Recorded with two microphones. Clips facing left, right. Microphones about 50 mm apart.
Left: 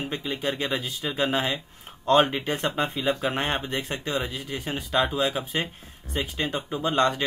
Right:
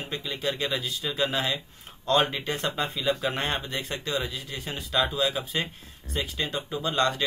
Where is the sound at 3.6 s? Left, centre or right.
Left.